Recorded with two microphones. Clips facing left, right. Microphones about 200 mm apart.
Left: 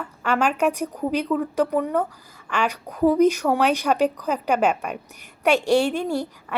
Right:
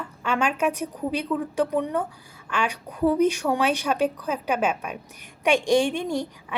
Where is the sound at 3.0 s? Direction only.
10° left (ahead or behind).